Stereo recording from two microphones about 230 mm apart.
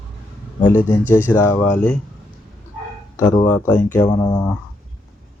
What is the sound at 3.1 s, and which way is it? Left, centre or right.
Speech, centre.